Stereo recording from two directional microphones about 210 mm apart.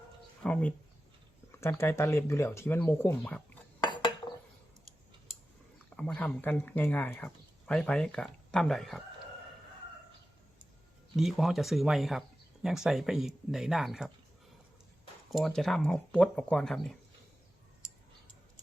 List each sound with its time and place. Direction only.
0.4 s speech: 5° left (ahead or behind)
3.8 s dishes: 20° left (ahead or behind)
6.0 s speech: 5° left (ahead or behind)
11.2 s speech: centre (ahead or behind)
15.3 s speech: centre (ahead or behind)